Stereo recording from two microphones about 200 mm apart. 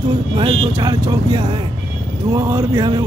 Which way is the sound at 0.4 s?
25° right (ahead or behind).